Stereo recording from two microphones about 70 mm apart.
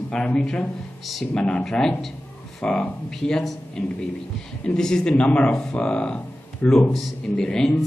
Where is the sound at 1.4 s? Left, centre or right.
Centre.